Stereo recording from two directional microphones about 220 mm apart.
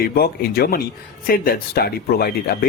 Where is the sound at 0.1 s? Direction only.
45° left (ahead or behind).